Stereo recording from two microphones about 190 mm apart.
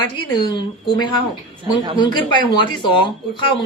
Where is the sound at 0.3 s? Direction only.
25° left (ahead or behind).